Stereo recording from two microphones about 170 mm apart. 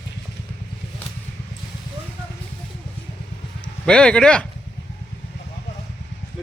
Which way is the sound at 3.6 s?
5° left (ahead or behind).